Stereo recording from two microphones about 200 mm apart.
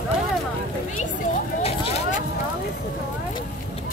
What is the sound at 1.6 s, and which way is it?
Vehicle, 30° left (ahead or behind).